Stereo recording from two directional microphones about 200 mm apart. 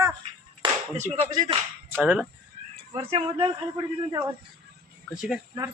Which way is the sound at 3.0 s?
25° right (ahead or behind).